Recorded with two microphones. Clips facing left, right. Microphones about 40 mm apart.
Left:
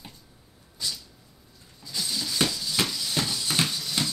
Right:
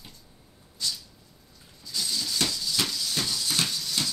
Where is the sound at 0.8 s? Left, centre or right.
Centre.